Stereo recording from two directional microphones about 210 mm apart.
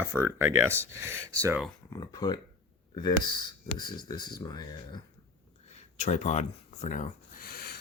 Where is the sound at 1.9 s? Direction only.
20° left (ahead or behind).